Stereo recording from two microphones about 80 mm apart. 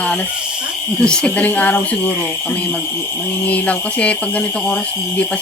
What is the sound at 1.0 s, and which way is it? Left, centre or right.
Speech, centre.